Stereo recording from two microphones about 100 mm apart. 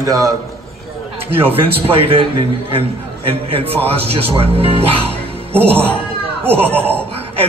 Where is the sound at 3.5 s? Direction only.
70° right (ahead or behind).